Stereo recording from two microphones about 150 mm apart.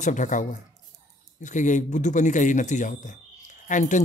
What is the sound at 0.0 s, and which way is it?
Speech, 55° left (ahead or behind).